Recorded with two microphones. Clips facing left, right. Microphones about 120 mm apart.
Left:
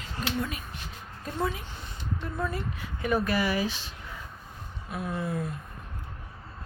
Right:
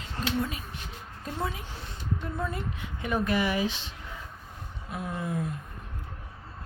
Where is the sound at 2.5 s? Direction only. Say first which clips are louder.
Left 1 dB; 20° right (ahead or behind).